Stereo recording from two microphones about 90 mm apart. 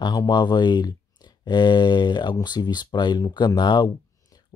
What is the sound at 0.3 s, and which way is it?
Speech, 55° left (ahead or behind).